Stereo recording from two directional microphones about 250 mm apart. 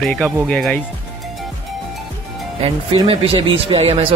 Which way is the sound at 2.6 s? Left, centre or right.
Right.